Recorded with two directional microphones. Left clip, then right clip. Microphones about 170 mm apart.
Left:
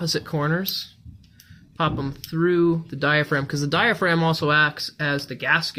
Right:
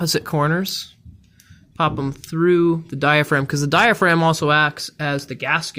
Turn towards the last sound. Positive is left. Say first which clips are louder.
# even
turn(degrees=-65)  # may be behind; listen again after turning